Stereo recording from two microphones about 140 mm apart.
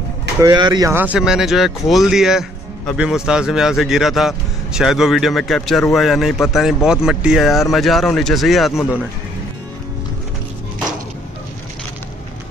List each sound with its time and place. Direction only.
0.4 s speech: 30° right (ahead or behind)
0.9 s speech: 10° right (ahead or behind)